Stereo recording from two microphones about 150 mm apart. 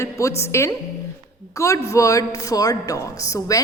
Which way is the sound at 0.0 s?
20° left (ahead or behind).